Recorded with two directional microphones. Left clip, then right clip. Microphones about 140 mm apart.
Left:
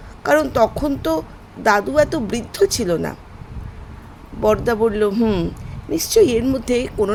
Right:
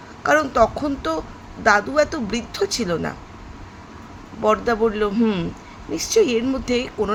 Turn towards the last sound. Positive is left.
turn(degrees=50)  # may be behind; listen again after turning